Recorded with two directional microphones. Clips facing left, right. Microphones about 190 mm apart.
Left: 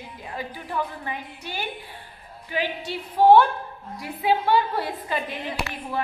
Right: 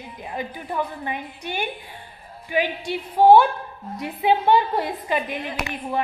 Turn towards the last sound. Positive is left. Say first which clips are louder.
# right 3 dB
turn(degrees=-15)  # may be behind; listen again after turning